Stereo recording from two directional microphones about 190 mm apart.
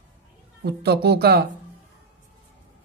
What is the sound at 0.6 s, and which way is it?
Speech, 55° right (ahead or behind).